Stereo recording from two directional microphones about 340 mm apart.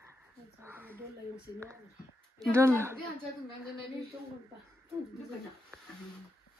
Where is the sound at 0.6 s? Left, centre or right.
Centre.